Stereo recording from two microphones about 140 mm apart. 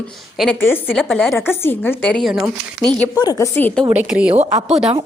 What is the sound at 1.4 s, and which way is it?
A woman's voice, 15° left (ahead or behind).